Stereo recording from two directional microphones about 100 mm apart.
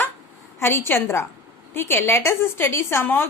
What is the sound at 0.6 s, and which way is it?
A woman's voice, 25° left (ahead or behind).